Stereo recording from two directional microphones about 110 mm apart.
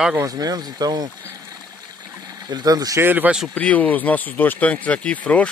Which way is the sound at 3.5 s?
15° left (ahead or behind).